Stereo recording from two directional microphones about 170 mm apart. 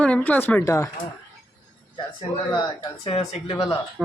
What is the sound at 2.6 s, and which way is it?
Speech, 30° left (ahead or behind).